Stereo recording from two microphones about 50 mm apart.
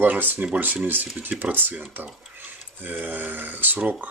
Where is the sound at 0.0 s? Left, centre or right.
Right.